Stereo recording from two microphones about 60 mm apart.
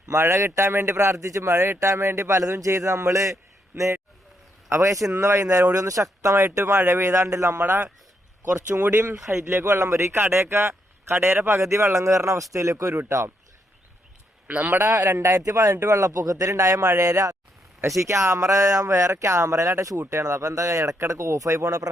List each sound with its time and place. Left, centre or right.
0.2 s a man's voice: right
0.9 s speech: right
3.7 s a man's voice: right
4.8 s speech: right
8.9 s speech: right
9.1 s speech: centre
9.5 s a man's voice: right
14.4 s speech: centre
14.7 s a man's voice: right
15.2 s a man's voice: right
18.0 s speech: right